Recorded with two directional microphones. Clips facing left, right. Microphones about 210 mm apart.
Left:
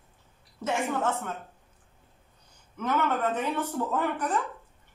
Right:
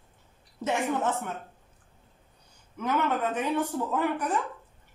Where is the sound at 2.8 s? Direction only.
10° right (ahead or behind).